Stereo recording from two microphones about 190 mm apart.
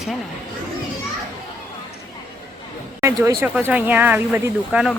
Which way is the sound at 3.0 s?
15° right (ahead or behind).